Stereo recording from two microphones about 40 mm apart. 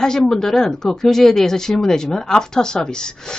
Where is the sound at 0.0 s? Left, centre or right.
Centre.